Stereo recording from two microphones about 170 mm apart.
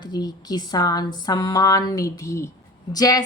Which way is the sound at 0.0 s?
25° left (ahead or behind).